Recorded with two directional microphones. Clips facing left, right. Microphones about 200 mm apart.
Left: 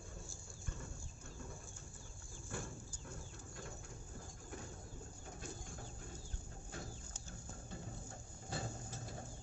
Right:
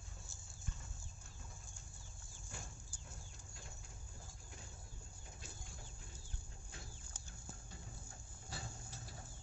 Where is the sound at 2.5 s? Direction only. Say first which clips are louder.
Left 9 dB; 55° left (ahead or behind).